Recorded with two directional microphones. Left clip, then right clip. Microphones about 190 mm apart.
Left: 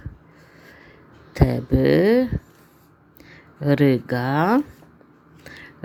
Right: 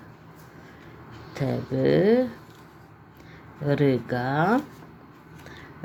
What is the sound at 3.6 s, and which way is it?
Speech, 40° left (ahead or behind).